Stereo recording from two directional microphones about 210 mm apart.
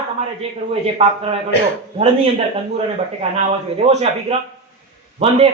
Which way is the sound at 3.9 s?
30° right (ahead or behind).